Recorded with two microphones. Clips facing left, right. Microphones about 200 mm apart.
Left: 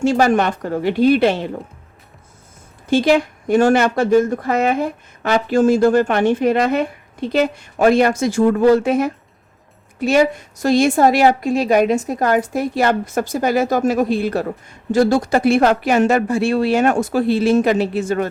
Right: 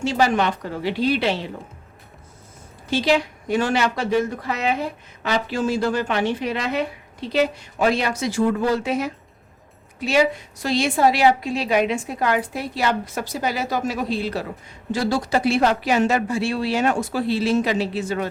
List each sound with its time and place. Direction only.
0.0 s speech: 50° left (ahead or behind)
2.9 s speech: 50° left (ahead or behind)